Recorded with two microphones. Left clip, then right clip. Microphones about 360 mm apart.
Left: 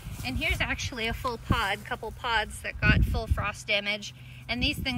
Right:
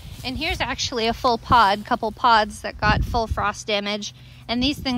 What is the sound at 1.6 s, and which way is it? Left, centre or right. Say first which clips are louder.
Speech: right 10 dB; right.